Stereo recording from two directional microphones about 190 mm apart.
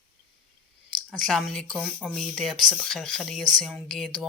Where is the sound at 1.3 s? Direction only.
Centre (ahead or behind).